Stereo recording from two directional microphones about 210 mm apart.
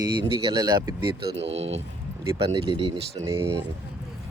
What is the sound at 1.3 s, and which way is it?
Speech, 60° right (ahead or behind).